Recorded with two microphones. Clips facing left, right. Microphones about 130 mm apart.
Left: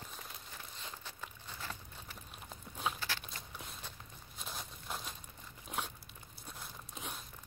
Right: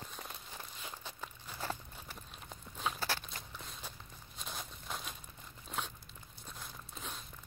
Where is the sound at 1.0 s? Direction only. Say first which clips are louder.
Right 2 dB; 15° right (ahead or behind).